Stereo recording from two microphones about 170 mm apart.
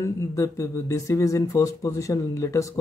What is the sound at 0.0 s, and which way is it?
Speech, 15° left (ahead or behind).